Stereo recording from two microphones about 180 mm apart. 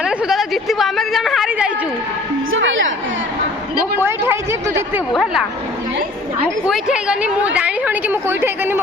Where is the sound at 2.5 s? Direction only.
90° right.